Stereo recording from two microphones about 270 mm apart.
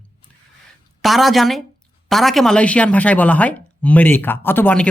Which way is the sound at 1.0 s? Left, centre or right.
Centre.